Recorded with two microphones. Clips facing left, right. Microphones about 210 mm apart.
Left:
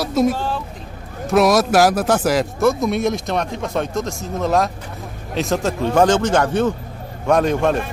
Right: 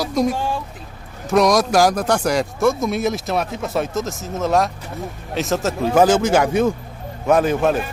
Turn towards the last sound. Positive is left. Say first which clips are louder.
# even
turn(degrees=-5)  # may be behind; listen again after turning